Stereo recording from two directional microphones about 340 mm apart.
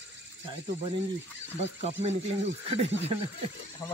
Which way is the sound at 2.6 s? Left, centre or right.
Centre.